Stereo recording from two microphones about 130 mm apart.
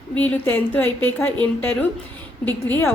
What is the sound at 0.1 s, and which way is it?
A woman's voice, 15° left (ahead or behind).